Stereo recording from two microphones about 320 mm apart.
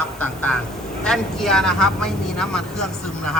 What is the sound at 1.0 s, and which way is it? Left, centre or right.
A man's voice, centre.